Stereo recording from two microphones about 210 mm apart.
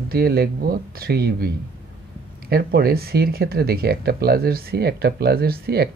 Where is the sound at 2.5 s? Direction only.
50° right (ahead or behind).